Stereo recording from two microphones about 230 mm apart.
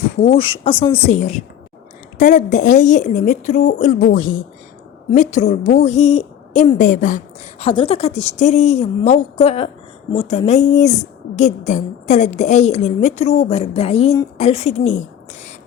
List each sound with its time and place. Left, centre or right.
0.3 s a woman's voice: left
7.6 s speech: left